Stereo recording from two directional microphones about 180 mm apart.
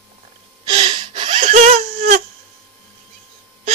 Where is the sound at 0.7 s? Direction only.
25° right (ahead or behind); by 2.2 s 45° right (ahead or behind).